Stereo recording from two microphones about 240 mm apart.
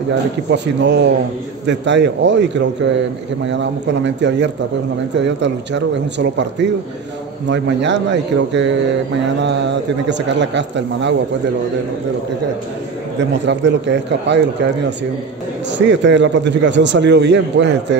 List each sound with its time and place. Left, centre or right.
0.5 s a man's voice: right
13.5 s a man's voice: right
15.8 s a man's voice: right